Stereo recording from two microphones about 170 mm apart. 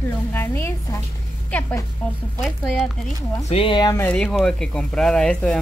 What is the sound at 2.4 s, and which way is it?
Speech, centre (ahead or behind).